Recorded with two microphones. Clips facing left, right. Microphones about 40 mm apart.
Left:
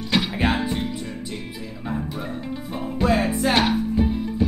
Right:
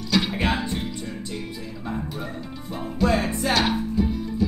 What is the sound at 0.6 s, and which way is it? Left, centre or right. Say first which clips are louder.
Music: left 3 dB; centre.